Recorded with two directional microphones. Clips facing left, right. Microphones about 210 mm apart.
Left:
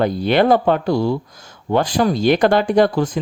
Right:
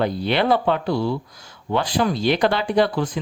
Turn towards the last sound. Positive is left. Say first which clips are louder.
# left 4 dB
turn(degrees=45)  # may be behind; listen again after turning